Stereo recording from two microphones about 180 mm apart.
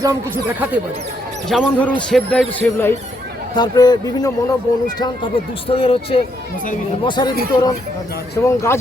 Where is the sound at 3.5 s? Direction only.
25° left (ahead or behind).